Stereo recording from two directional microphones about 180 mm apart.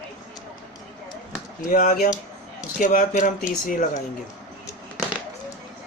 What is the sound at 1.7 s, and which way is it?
Speech, 45° left (ahead or behind).